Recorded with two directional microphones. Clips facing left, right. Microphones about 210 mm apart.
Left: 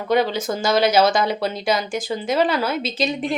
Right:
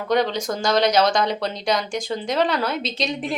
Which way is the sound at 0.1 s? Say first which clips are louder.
Left 2 dB; 5° left (ahead or behind).